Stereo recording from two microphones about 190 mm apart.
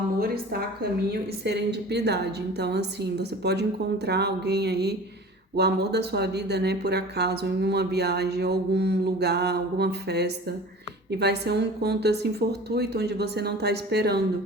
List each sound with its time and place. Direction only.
1.5 s speech: 60° right (ahead or behind)